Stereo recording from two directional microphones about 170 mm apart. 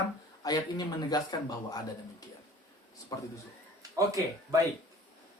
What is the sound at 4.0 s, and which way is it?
Speech, 20° right (ahead or behind).